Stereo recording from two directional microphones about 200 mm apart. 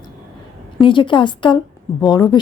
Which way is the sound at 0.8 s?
25° left (ahead or behind).